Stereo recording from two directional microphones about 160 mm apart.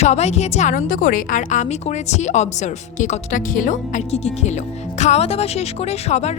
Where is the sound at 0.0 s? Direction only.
40° left (ahead or behind).